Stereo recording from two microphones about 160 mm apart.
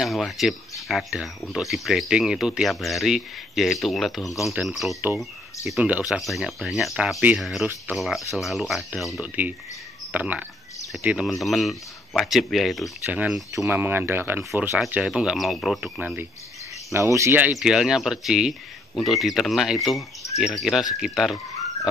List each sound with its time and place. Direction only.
0.0 s speech: centre (ahead or behind)
16.0 s speech: 10° right (ahead or behind)